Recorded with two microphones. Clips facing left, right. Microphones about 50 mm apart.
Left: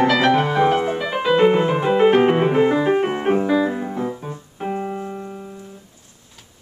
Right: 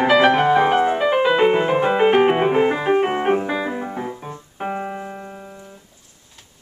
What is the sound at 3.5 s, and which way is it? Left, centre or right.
Keyboard, centre.